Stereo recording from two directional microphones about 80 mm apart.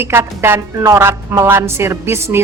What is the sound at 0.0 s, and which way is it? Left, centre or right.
A woman's voice, right.